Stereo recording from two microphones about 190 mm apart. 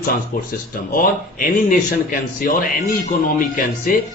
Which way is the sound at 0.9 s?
45° left (ahead or behind).